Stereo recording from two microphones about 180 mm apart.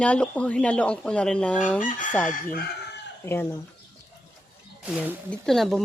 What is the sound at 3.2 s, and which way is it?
Speech, 15° left (ahead or behind).